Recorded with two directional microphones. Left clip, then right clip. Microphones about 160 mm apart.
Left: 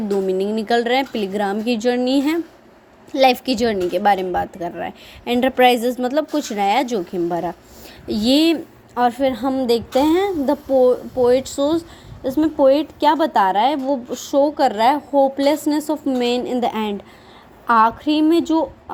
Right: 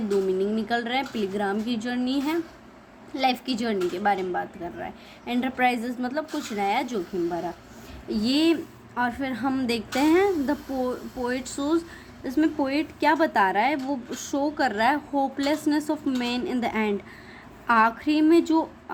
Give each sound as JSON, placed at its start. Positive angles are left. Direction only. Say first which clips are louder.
{"t": 0.3, "sound": "a woman's voice", "louder": "left 6 dB", "side_deg": 45}
{"t": 9.0, "sound": "a woman's voice", "louder": "left 10 dB", "side_deg": 35}
{"t": 9.5, "sound": "a woman's voice", "louder": "left 9 dB", "side_deg": 15}